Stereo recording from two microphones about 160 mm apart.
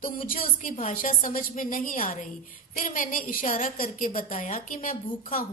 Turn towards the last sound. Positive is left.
turn(degrees=60)  # may be behind; listen again after turning